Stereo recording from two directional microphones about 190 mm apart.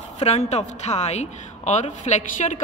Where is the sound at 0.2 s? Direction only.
35° left (ahead or behind).